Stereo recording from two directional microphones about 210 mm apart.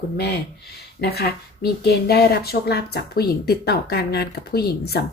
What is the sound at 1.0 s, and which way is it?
A woman's voice, 50° left (ahead or behind).